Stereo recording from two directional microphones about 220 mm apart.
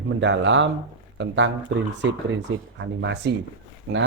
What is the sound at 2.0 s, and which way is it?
Speech, 55° right (ahead or behind).